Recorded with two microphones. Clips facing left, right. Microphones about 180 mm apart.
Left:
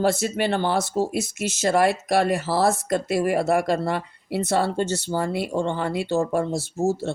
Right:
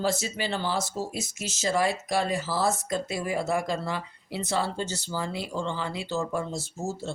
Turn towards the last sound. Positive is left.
turn(degrees=55)  # may be behind; listen again after turning